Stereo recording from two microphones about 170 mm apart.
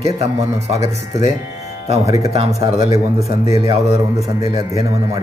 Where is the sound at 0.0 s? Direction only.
40° right (ahead or behind).